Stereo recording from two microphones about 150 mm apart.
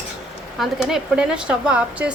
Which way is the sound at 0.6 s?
Centre (ahead or behind).